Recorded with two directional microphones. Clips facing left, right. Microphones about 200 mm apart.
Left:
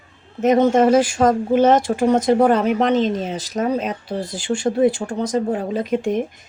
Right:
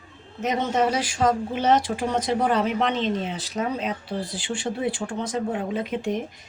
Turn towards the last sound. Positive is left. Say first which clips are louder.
# left 6 dB
turn(degrees=40)  # may be behind; listen again after turning